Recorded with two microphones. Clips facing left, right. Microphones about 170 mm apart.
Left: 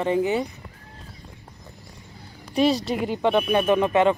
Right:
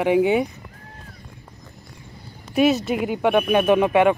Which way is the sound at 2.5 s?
10° right (ahead or behind).